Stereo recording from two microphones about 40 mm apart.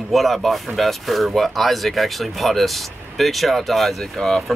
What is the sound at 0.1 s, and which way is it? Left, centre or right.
Speech, centre.